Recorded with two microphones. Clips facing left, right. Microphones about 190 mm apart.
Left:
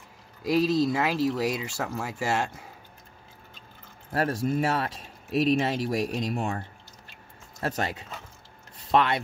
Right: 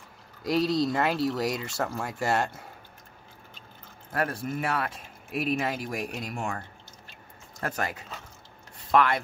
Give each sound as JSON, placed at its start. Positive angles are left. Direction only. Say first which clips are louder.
{"t": 0.5, "sound": "speech", "louder": "left 2 dB", "side_deg": 5}
{"t": 4.1, "sound": "a man's voice", "louder": "left 4 dB", "side_deg": 30}
{"t": 7.6, "sound": "speech", "louder": "left 2 dB", "side_deg": 30}
{"t": 8.9, "sound": "speech", "louder": "even", "side_deg": 20}